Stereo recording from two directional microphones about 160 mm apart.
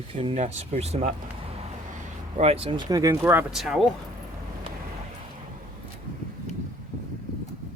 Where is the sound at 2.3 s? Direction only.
40° right (ahead or behind); by 3.4 s 15° right (ahead or behind).